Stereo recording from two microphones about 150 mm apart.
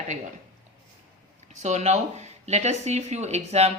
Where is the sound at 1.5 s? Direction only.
50° right (ahead or behind).